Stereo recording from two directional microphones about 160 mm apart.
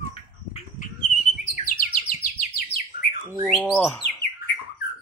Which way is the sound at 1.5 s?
55° left (ahead or behind).